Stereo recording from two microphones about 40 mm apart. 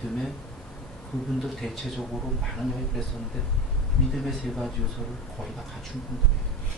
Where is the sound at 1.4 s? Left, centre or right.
Centre.